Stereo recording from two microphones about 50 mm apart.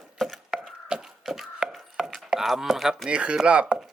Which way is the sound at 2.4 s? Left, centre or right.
Centre.